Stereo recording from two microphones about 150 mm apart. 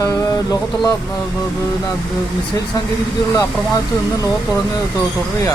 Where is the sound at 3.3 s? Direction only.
25° left (ahead or behind).